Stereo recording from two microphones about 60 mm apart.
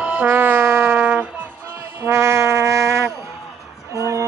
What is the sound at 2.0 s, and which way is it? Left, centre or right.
Brass instrument, right.